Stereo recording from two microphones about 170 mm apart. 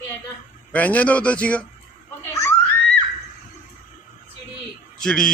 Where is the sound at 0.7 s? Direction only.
10° left (ahead or behind).